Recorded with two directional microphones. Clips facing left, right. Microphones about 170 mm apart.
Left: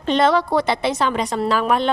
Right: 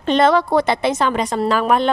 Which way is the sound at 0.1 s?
50° right (ahead or behind).